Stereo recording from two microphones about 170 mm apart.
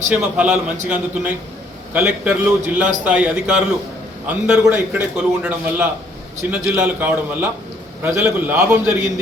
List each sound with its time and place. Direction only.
0.1 s a man's voice: 10° right (ahead or behind)